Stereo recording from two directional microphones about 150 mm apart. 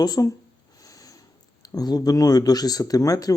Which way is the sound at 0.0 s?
25° left (ahead or behind).